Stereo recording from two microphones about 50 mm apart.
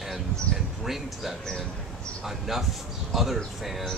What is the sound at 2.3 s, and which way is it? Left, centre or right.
Speech, centre.